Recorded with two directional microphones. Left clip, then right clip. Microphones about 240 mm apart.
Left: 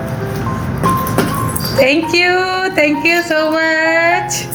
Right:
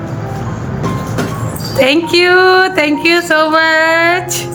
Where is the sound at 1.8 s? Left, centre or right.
Right.